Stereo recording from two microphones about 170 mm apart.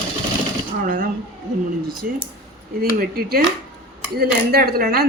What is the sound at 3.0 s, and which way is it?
A woman's voice, 65° right (ahead or behind).